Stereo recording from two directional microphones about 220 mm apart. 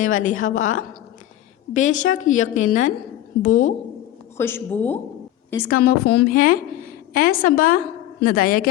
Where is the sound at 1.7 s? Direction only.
35° left (ahead or behind).